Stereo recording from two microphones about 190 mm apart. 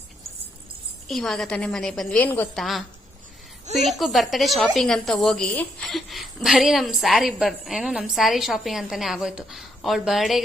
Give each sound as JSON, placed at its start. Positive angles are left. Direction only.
{"t": 1.0, "sound": "a woman's voice", "side_deg": 0}
{"t": 3.8, "sound": "a woman's voice", "side_deg": 0}